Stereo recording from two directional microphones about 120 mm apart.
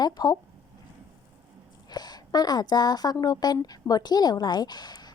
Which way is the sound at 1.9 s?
35° left (ahead or behind).